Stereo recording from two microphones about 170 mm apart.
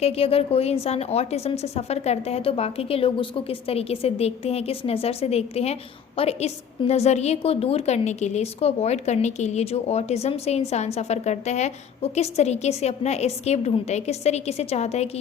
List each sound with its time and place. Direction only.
0.0 s a woman's voice: 35° left (ahead or behind)